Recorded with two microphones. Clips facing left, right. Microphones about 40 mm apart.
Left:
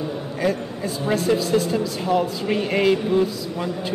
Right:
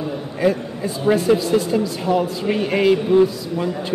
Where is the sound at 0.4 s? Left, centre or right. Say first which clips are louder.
Right 4 dB; centre.